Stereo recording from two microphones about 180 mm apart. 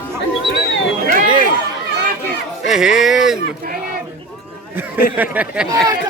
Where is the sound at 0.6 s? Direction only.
80° left.